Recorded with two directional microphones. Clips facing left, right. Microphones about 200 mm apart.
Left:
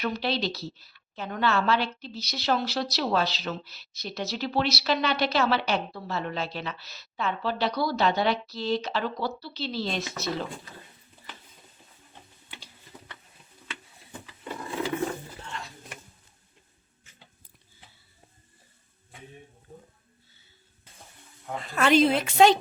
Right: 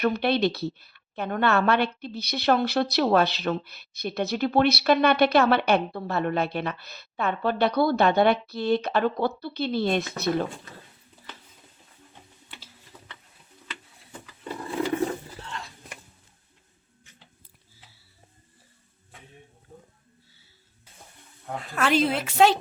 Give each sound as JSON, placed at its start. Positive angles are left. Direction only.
{"t": 0.0, "sound": "a woman's voice", "side_deg": -55}
{"t": 21.6, "sound": "a woman's voice", "side_deg": -5}